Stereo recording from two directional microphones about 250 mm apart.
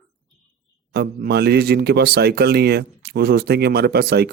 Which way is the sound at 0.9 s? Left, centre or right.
Right.